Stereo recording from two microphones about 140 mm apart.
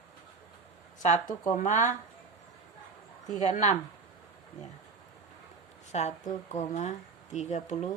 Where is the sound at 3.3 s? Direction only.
60° left (ahead or behind).